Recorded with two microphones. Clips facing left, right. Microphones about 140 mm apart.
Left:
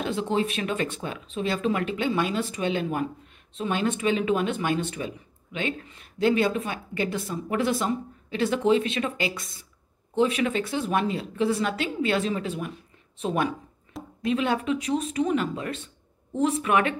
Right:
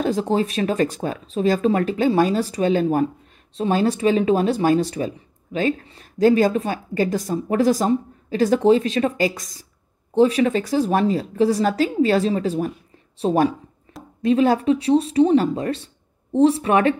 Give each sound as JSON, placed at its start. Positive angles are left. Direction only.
{"t": 0.0, "sound": "speech", "side_deg": -40}